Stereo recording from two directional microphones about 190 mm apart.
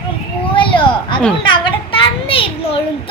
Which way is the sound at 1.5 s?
25° left (ahead or behind).